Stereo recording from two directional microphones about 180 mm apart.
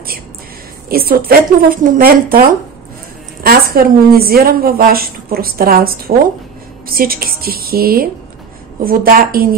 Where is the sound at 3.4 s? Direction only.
55° right (ahead or behind).